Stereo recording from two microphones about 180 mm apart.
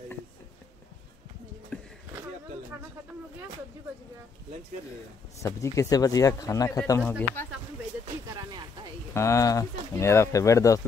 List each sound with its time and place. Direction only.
1.7 s a sound: 5° left (ahead or behind)
5.4 s a man's voice: 15° left (ahead or behind)
9.1 s speech: 15° left (ahead or behind)